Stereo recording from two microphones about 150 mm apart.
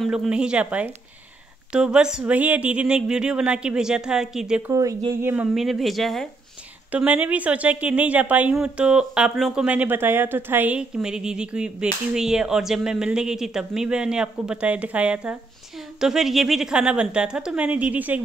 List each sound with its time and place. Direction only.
0.0 s speech: 5° right (ahead or behind)
4.7 s speech: 20° right (ahead or behind)
5.3 s speech: 5° right (ahead or behind)